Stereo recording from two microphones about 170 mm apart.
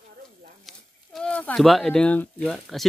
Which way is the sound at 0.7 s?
5° left (ahead or behind).